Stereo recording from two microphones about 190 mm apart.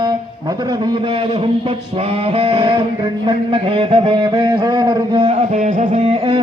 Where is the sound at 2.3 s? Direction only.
30° right (ahead or behind).